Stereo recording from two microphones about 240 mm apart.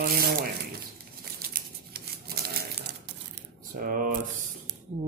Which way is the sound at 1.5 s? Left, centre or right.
Right.